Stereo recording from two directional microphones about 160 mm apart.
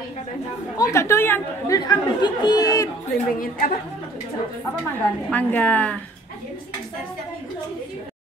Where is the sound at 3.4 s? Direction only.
60° left (ahead or behind).